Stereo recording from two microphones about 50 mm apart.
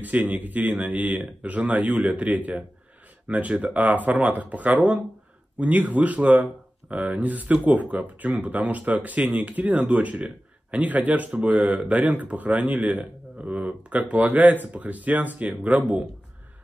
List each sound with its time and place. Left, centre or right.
0.0 s speech: right